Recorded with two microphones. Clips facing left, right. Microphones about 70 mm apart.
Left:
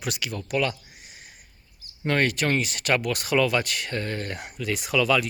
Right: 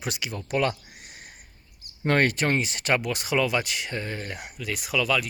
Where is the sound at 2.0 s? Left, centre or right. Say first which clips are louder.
Right 1 dB; right; by 5.3 s centre.